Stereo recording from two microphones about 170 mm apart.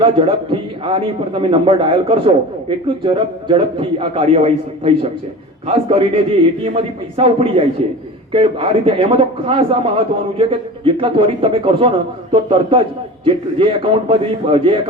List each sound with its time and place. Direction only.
0.0 s a man's voice: 30° right (ahead or behind)